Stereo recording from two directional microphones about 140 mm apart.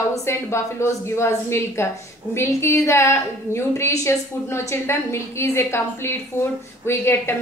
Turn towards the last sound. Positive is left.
turn(degrees=15)  # may be behind; listen again after turning